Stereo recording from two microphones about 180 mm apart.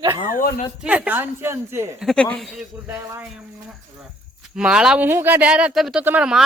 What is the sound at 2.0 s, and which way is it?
Speech, 5° left (ahead or behind).